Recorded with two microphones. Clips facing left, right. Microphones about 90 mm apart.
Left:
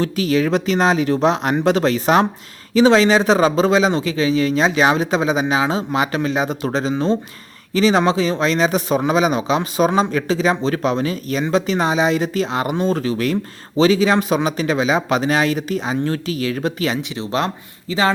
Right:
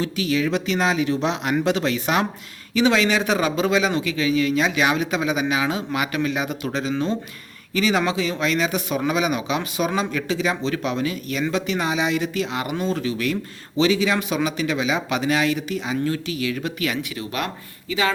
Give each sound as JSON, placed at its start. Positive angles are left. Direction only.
{"t": 0.0, "sound": "speech", "side_deg": 40}